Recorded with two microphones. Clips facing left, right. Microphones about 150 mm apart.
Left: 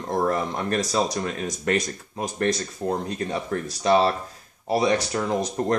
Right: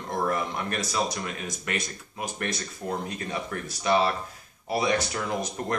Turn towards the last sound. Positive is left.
turn(degrees=35)  # may be behind; listen again after turning